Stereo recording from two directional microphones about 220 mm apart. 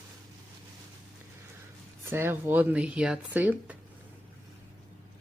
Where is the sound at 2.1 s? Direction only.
10° right (ahead or behind).